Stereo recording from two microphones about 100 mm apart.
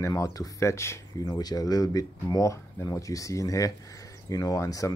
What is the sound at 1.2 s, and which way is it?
Speech, 40° left (ahead or behind).